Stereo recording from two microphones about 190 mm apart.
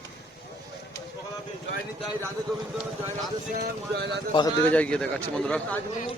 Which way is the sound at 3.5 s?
55° right (ahead or behind).